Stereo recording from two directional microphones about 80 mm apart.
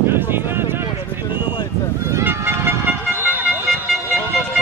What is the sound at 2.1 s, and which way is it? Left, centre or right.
Vehicle, right.